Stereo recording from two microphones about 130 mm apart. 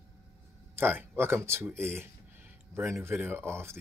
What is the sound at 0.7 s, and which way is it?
Speech, 15° right (ahead or behind).